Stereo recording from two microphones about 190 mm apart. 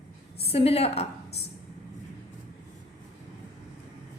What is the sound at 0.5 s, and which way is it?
Speech, 30° left (ahead or behind).